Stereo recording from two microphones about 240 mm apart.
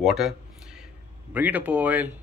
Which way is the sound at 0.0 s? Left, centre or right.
Centre.